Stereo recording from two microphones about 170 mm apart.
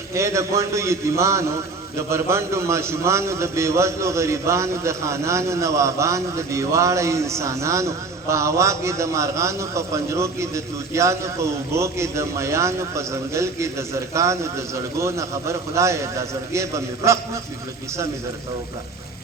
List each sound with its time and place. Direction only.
0.1 s a man's voice: 15° right (ahead or behind)